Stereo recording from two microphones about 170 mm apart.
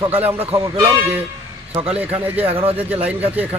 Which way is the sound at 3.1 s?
10° right (ahead or behind).